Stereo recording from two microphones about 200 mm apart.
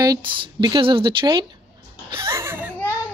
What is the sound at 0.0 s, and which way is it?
Speech, 20° right (ahead or behind).